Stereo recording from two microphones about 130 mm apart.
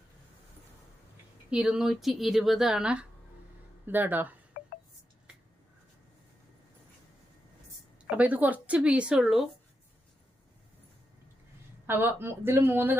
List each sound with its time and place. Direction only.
1.5 s speech: 5° right (ahead or behind)
8.1 s speech: 10° right (ahead or behind)
11.9 s speech: 15° right (ahead or behind)